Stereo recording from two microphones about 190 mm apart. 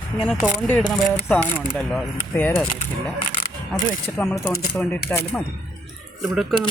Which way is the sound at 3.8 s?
15° left (ahead or behind).